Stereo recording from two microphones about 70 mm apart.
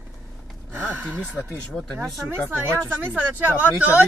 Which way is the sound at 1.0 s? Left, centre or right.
Right.